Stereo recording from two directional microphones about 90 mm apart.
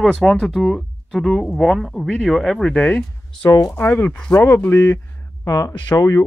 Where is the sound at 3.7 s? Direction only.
25° left (ahead or behind).